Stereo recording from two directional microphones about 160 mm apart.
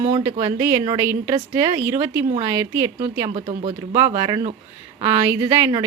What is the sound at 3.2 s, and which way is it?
Speech, 35° right (ahead or behind).